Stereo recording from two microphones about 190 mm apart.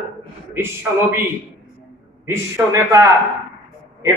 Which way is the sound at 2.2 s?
15° right (ahead or behind).